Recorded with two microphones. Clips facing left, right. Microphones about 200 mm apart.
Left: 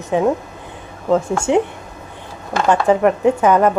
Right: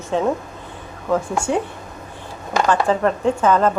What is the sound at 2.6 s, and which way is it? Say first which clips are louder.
A woman's voice: left 5 dB; 20° left (ahead or behind).